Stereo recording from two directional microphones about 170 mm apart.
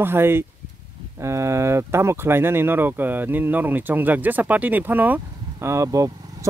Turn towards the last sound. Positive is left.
turn(degrees=-20)  # may be behind; listen again after turning